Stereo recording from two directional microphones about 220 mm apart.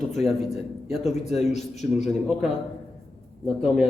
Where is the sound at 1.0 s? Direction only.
30° left (ahead or behind).